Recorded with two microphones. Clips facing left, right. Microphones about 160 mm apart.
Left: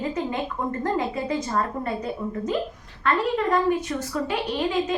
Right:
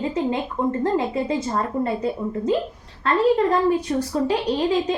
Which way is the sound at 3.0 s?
35° right (ahead or behind).